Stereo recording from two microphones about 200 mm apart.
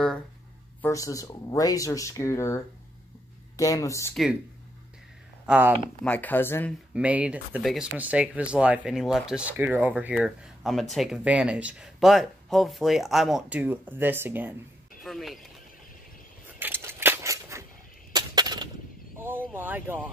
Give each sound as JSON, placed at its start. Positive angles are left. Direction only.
{"t": 0.8, "sound": "speech", "side_deg": 15}
{"t": 4.1, "sound": "speech", "side_deg": 0}
{"t": 5.7, "sound": "speech", "side_deg": 10}
{"t": 6.9, "sound": "speech", "side_deg": -5}
{"t": 15.0, "sound": "speech", "side_deg": 0}
{"t": 16.4, "sound": "scissors", "side_deg": -10}
{"t": 18.1, "sound": "a sound", "side_deg": -20}
{"t": 19.1, "sound": "a sound", "side_deg": -10}